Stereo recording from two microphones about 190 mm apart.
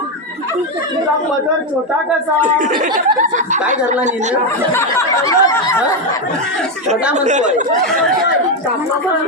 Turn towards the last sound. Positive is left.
turn(degrees=-40)  # may be behind; listen again after turning